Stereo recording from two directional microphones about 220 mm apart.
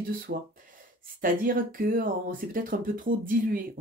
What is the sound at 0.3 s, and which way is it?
Speech, 45° right (ahead or behind).